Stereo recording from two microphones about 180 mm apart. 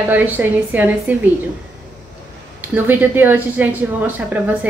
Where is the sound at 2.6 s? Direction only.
10° right (ahead or behind).